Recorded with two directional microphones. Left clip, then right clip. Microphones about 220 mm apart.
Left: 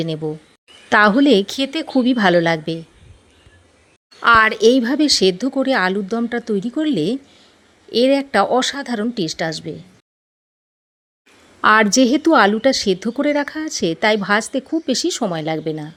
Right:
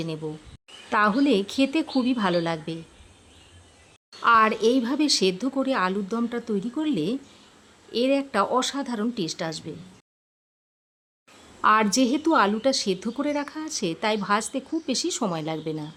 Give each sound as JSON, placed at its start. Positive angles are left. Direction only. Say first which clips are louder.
{"t": 0.0, "sound": "a woman's voice", "louder": "left 9 dB", "side_deg": 20}
{"t": 4.2, "sound": "a woman's voice", "louder": "left 7 dB", "side_deg": 25}
{"t": 11.6, "sound": "a woman's voice", "louder": "left 7 dB", "side_deg": 20}